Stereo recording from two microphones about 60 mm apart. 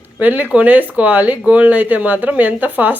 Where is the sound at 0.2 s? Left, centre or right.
Right.